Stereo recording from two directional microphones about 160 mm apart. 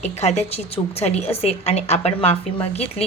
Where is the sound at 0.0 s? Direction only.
45° left (ahead or behind).